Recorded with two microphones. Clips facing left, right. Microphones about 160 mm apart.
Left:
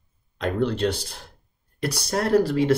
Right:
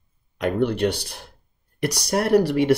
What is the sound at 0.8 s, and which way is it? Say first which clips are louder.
Speech: right 2 dB; 65° right (ahead or behind).